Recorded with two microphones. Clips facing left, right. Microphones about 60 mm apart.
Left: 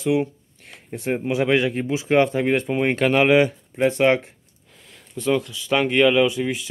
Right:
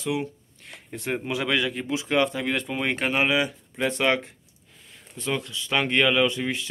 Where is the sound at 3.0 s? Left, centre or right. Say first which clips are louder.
Left 8 dB; left.